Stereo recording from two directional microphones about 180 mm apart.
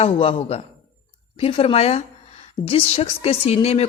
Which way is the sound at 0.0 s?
30° left (ahead or behind).